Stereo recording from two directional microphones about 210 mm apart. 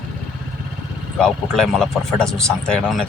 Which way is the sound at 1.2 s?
Centre (ahead or behind).